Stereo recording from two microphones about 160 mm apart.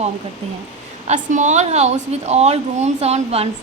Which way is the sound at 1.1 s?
50° right (ahead or behind).